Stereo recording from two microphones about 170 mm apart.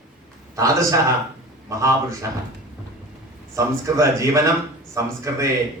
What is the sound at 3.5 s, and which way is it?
A man's voice, 20° right (ahead or behind).